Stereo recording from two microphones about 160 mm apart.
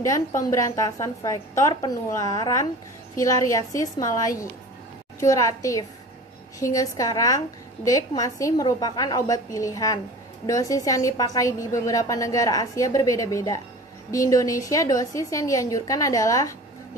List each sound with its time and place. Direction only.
0.4 s a woman's voice: 20° left (ahead or behind)